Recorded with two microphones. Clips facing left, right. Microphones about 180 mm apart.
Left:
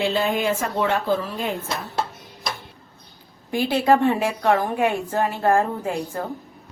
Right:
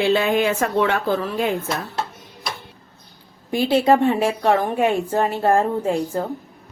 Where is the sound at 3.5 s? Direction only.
20° right (ahead or behind).